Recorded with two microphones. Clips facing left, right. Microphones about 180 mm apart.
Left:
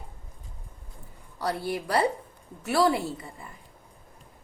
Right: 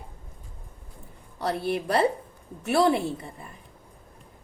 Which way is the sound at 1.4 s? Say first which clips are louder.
Right 2 dB; 25° right (ahead or behind).